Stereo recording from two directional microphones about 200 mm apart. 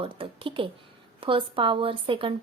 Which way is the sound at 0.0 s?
25° right (ahead or behind).